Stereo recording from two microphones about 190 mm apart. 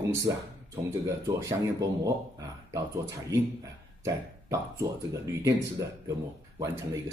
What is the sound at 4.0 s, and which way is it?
Speech, 15° right (ahead or behind).